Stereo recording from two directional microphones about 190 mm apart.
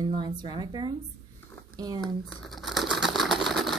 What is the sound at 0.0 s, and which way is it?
Speech, 25° right (ahead or behind).